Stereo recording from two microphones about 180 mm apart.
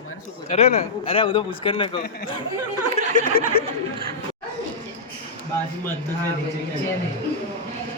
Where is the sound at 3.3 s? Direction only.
55° left (ahead or behind).